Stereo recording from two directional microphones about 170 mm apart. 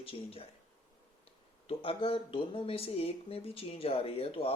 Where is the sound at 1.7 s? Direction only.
30° left (ahead or behind).